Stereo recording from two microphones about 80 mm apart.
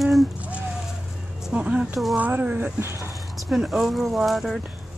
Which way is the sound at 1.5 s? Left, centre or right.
Centre.